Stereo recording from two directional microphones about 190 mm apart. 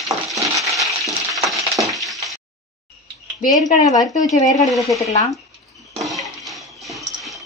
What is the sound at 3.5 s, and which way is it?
Speech, 20° left (ahead or behind).